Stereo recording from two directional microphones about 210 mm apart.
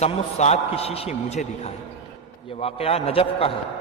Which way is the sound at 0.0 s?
30° left (ahead or behind).